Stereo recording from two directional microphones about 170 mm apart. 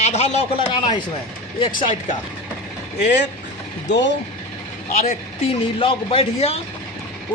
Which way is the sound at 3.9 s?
90° left.